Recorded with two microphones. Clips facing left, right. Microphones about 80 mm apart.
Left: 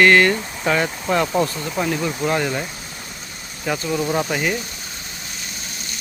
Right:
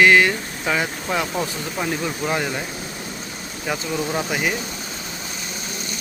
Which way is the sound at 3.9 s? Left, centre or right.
Centre.